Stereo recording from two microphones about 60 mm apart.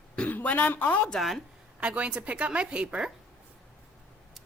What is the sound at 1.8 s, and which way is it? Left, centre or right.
Speech, right.